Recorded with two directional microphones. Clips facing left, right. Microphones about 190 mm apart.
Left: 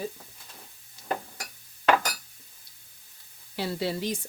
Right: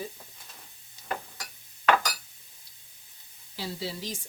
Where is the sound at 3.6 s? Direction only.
60° left (ahead or behind).